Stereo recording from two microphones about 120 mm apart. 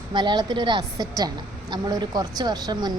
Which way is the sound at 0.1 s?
40° right (ahead or behind).